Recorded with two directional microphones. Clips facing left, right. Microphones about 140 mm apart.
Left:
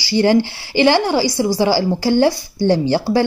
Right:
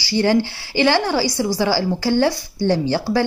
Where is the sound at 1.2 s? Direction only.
5° left (ahead or behind).